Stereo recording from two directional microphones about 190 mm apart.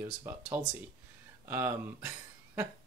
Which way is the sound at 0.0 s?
15° right (ahead or behind).